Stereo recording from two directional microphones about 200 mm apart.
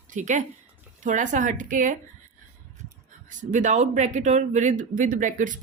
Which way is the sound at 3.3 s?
40° right (ahead or behind).